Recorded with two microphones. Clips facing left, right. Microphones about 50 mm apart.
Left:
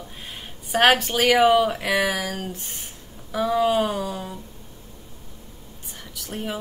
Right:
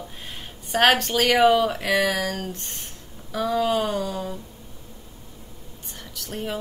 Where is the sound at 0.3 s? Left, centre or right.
Centre.